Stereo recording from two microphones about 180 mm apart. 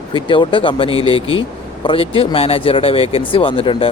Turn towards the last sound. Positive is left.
turn(degrees=30)  # may be behind; listen again after turning